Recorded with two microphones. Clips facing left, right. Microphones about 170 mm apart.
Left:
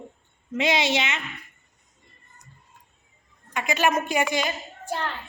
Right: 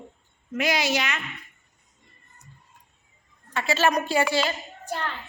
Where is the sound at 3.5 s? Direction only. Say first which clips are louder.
Even; 15° left (ahead or behind).